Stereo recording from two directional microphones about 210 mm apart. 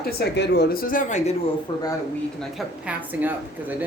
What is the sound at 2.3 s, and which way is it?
A woman's voice, 5° right (ahead or behind).